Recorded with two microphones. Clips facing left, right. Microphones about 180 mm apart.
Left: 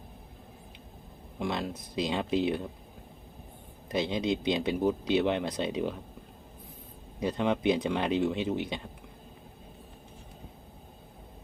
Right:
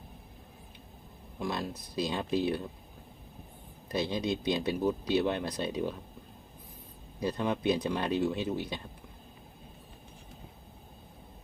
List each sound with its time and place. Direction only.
1.4 s speech: 25° left (ahead or behind)
3.8 s speech: 20° left (ahead or behind)
7.2 s speech: 20° left (ahead or behind)